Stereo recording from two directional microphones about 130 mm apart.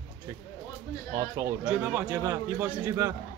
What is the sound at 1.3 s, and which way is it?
Speech, 20° right (ahead or behind).